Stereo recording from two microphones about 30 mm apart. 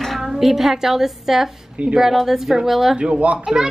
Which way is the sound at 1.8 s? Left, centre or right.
Right.